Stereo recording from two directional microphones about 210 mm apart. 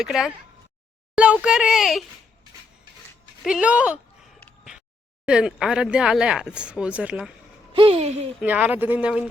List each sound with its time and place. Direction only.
0.0 s speech: centre (ahead or behind)
3.4 s speech: 5° right (ahead or behind)
4.4 s a sound: centre (ahead or behind)
5.2 s speech: 5° right (ahead or behind)
7.7 s a sound: 25° right (ahead or behind)
8.4 s speech: 5° right (ahead or behind)